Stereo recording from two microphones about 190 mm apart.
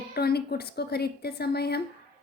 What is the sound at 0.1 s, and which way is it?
A woman's voice, 55° left (ahead or behind).